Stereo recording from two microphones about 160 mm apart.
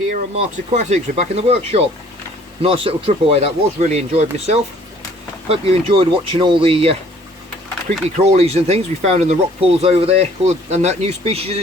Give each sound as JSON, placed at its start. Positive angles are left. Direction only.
{"t": 0.1, "sound": "speech", "side_deg": -50}
{"t": 8.1, "sound": "speech", "side_deg": -45}